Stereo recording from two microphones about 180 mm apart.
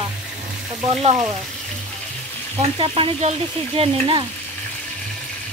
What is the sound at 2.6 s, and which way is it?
Frying, 30° right (ahead or behind).